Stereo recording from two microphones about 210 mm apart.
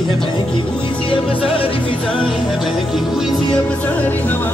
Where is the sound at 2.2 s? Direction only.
Centre (ahead or behind).